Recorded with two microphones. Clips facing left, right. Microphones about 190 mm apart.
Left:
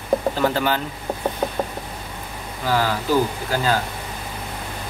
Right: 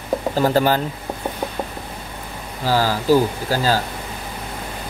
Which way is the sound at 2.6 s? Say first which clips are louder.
Right 3 dB; 30° right (ahead or behind).